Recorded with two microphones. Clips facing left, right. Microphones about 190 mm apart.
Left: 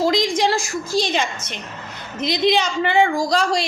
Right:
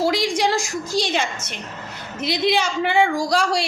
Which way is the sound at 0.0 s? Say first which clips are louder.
Left 2 dB; 10° right (ahead or behind).